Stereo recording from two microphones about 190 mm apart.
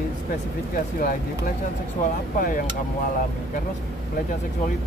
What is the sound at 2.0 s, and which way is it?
Speech, 50° left (ahead or behind).